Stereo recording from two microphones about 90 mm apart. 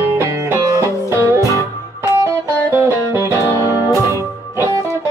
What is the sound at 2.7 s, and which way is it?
Music, 25° right (ahead or behind).